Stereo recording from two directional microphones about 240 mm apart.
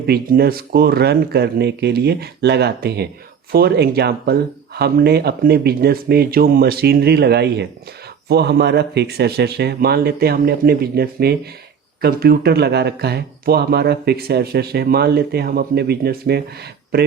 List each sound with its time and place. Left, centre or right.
0.1 s speech: right